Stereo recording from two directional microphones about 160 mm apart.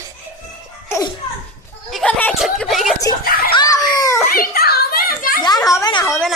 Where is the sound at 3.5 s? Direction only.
25° left (ahead or behind).